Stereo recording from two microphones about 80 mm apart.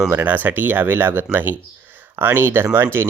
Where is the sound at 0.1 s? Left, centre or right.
Right.